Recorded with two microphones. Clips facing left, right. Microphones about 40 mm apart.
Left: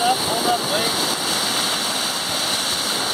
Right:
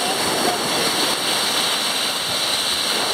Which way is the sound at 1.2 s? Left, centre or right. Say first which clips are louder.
Right 1 dB; centre.